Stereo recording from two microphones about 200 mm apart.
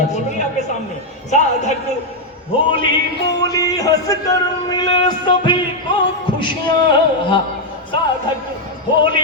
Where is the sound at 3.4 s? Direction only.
15° left (ahead or behind).